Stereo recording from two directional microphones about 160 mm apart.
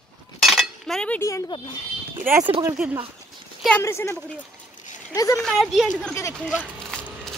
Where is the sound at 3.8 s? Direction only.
15° left (ahead or behind).